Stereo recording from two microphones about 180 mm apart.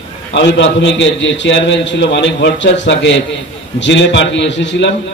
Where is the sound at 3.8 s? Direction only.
90° left.